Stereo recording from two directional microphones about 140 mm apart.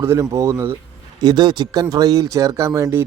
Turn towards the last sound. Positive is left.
turn(degrees=-20)  # may be behind; listen again after turning